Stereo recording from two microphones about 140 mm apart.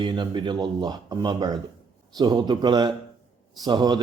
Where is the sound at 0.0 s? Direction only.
35° right (ahead or behind).